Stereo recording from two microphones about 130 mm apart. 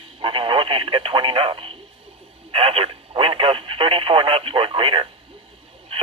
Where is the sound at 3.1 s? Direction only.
45° right (ahead or behind).